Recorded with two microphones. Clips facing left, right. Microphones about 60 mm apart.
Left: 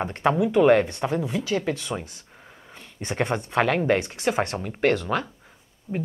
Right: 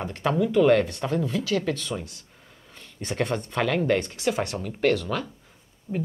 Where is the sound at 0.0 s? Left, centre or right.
Left.